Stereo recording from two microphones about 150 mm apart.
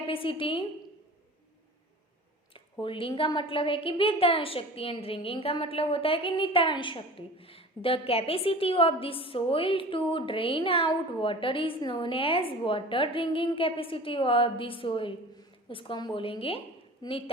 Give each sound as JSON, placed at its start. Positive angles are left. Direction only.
{"t": 0.1, "sound": "a woman's voice", "side_deg": 35}
{"t": 2.8, "sound": "a woman's voice", "side_deg": 35}